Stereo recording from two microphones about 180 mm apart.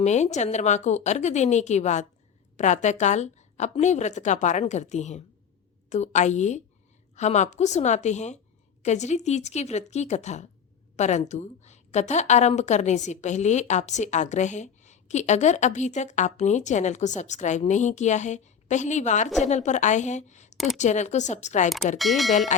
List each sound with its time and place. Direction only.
0.0 s a woman's voice: 40° left (ahead or behind)
21.9 s speech: centre (ahead or behind)
22.3 s speech: 40° left (ahead or behind)